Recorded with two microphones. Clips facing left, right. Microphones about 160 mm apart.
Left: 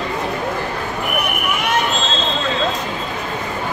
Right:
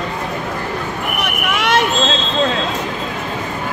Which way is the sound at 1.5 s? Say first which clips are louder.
Right 5 dB; 90° right.